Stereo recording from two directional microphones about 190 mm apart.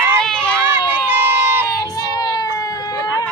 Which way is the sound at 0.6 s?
10° right (ahead or behind).